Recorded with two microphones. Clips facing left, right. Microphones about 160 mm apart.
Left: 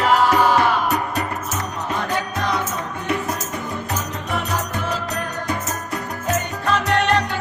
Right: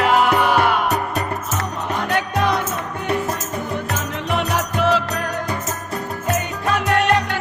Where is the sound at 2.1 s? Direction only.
70° right (ahead or behind).